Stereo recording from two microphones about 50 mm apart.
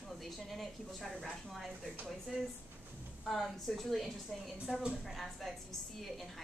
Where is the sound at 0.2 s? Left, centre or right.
Centre.